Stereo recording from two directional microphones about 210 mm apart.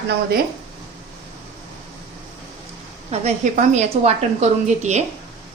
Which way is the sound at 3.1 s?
35° right (ahead or behind).